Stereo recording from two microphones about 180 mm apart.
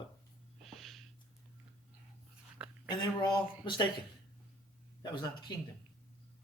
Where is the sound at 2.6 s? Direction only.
5° right (ahead or behind).